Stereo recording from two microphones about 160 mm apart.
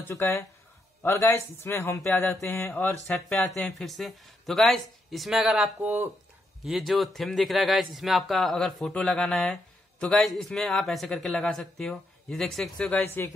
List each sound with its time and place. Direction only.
0.1 s speech: 15° left (ahead or behind)
3.1 s speech: 5° left (ahead or behind)